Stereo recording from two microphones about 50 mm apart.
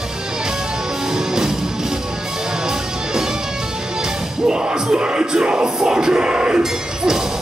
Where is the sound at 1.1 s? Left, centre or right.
Centre.